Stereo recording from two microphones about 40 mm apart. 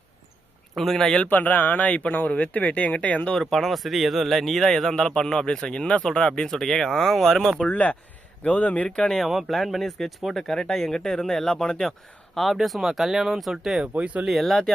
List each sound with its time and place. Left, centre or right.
0.8 s speech: centre
1.3 s speech: left
3.3 s speech: centre
7.7 s speech: left
9.0 s speech: centre
9.3 s speech: centre
14.0 s speech: right
14.3 s speech: centre